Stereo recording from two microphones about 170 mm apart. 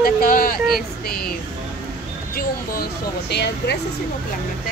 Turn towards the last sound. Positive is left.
turn(degrees=80)